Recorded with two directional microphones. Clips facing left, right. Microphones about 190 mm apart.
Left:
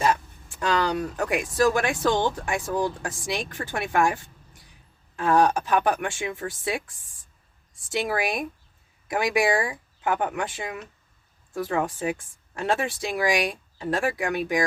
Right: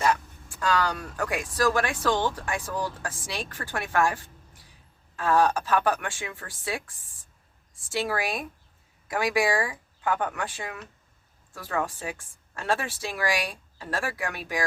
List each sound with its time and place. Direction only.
0.0 s speech: 20° left (ahead or behind)
5.1 s a woman's voice: 15° left (ahead or behind)
7.9 s a woman's voice: 20° left (ahead or behind)